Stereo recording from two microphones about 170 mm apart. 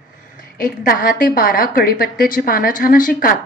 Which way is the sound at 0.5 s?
55° left (ahead or behind).